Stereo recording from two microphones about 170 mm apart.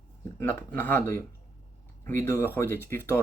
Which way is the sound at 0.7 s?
15° left (ahead or behind).